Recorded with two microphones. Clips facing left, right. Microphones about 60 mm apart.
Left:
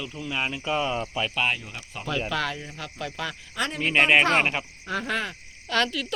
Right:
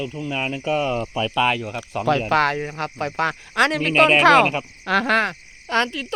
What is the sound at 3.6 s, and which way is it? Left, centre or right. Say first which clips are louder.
Speech: right 6 dB; right.